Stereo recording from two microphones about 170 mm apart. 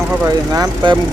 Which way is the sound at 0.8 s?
25° right (ahead or behind).